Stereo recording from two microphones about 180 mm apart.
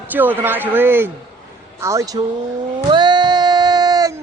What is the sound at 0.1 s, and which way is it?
Speech, 10° right (ahead or behind).